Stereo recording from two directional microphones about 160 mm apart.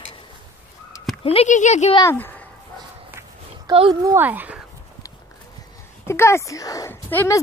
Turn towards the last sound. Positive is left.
turn(degrees=15)  # may be behind; listen again after turning